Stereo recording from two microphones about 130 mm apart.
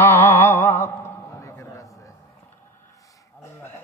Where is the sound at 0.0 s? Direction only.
20° left (ahead or behind).